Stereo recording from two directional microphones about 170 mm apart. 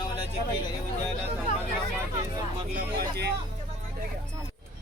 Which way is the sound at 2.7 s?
75° right (ahead or behind).